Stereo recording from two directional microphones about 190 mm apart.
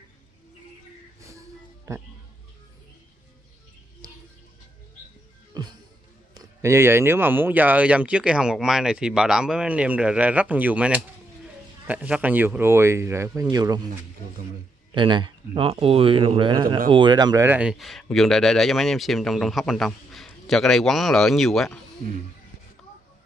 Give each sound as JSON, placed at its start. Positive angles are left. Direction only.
{"t": 1.9, "sound": "speech", "side_deg": -15}
{"t": 5.5, "sound": "music", "side_deg": -20}
{"t": 6.3, "sound": "speech", "side_deg": -15}
{"t": 15.0, "sound": "speech", "side_deg": -25}
{"t": 17.5, "sound": "speech", "side_deg": -5}